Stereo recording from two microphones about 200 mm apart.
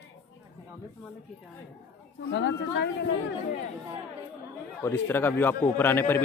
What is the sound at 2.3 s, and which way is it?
Speech, 65° left (ahead or behind).